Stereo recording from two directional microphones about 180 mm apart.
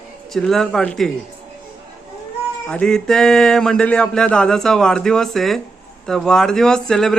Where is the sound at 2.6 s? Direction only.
5° left (ahead or behind).